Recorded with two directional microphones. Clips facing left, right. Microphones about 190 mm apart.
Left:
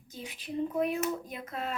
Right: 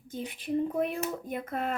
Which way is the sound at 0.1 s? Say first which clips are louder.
Right 7 dB; 55° right (ahead or behind).